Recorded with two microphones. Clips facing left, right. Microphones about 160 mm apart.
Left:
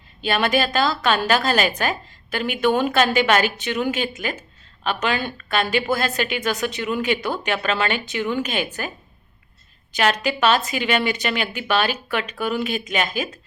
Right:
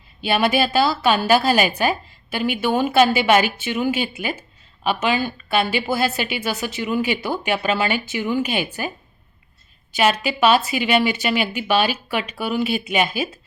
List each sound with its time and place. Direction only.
0.3 s a woman's voice: 10° right (ahead or behind)
9.9 s a woman's voice: 10° right (ahead or behind)